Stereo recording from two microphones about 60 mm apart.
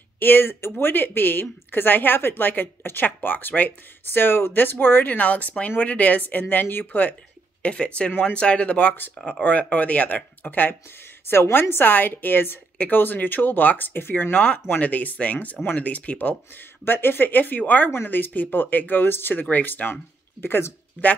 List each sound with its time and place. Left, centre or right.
0.2 s speech: left
7.6 s speech: centre; by 12.5 s left
12.7 s speech: left
14.3 s speech: left
16.8 s speech: left